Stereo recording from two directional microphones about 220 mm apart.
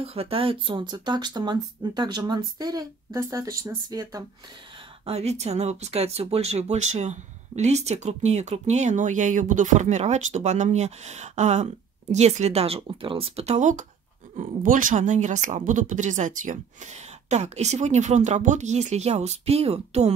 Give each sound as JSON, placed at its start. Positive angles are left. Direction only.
{"t": 0.0, "sound": "speech", "side_deg": -25}
{"t": 5.0, "sound": "speech", "side_deg": -30}